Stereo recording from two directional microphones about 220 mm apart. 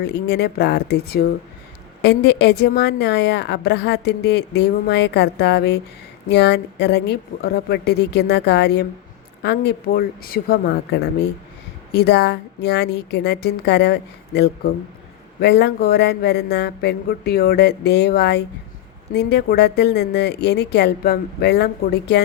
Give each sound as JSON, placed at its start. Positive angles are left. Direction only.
{"t": 0.0, "sound": "a woman's voice", "side_deg": 50}